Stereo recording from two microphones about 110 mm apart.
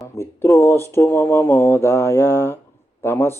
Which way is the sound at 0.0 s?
25° left (ahead or behind).